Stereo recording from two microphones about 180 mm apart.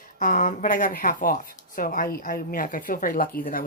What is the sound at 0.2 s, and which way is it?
Speech, 50° left (ahead or behind).